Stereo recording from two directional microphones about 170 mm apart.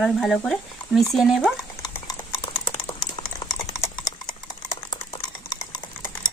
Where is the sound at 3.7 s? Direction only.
25° left (ahead or behind).